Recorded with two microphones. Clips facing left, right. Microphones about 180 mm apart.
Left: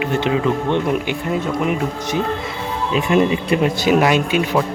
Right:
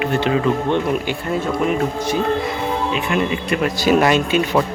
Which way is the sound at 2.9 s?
35° left (ahead or behind).